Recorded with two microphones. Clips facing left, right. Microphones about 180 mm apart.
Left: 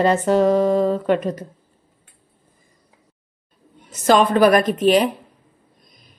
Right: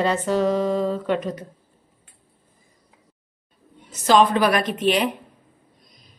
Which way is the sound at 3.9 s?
50° left (ahead or behind).